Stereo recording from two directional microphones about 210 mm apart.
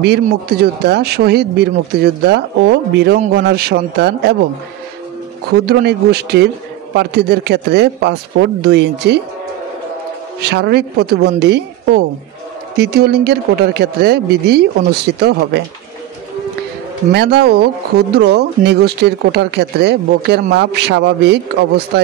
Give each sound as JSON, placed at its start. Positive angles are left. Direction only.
{"t": 0.0, "sound": "speech", "side_deg": -50}
{"t": 5.7, "sound": "speech", "side_deg": -50}
{"t": 10.4, "sound": "speech", "side_deg": -50}
{"t": 17.1, "sound": "speech", "side_deg": -50}